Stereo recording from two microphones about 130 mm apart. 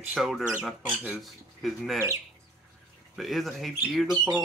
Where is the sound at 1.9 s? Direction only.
20° right (ahead or behind).